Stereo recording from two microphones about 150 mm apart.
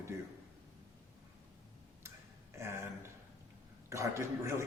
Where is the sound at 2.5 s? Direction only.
20° right (ahead or behind).